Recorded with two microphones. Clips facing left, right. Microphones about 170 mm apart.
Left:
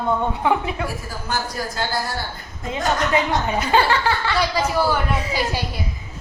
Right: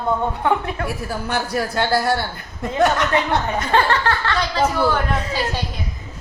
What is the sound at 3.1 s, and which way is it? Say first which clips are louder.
A woman's voice: even; 5° left (ahead or behind).